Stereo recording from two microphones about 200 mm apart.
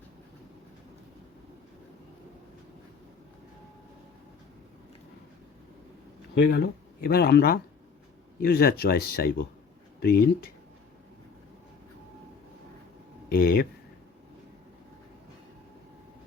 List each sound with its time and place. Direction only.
6.3 s speech: 60° left (ahead or behind)
13.3 s speech: 50° left (ahead or behind)